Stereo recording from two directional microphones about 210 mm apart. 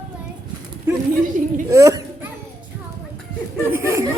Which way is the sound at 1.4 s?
40° right (ahead or behind).